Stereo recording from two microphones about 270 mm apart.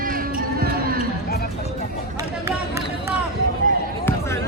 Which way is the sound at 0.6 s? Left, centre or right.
Right.